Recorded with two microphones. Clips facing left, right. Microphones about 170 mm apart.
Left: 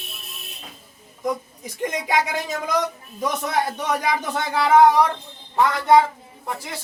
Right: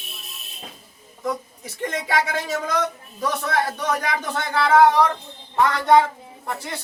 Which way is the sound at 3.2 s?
15° left (ahead or behind).